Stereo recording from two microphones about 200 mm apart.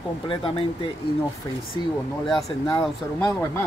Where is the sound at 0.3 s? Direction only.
25° left (ahead or behind).